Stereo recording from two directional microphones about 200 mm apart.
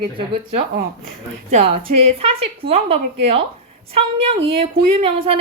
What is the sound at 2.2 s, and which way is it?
A woman's voice, 30° right (ahead or behind).